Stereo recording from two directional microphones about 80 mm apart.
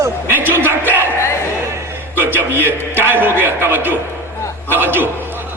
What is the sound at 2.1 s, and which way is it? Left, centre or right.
A man's voice, right.